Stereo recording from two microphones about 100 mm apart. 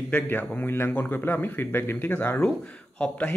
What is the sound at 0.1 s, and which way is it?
Speech, 20° left (ahead or behind).